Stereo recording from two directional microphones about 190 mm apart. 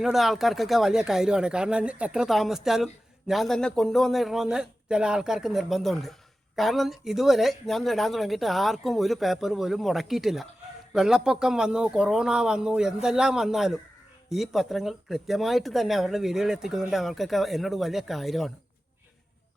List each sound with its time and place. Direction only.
0.0 s speech: centre (ahead or behind)